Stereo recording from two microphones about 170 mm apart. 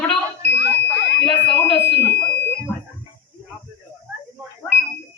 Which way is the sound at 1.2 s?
5° left (ahead or behind).